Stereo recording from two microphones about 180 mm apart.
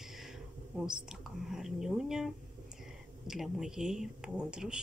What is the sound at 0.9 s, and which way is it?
A woman's voice, 5° right (ahead or behind).